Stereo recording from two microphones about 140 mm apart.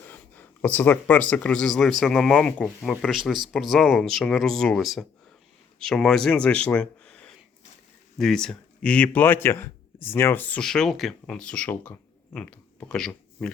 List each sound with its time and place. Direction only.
0.1 s speech: 10° left (ahead or behind)